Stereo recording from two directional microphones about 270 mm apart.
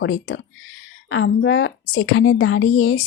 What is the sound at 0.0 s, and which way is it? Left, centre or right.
A woman's voice, left.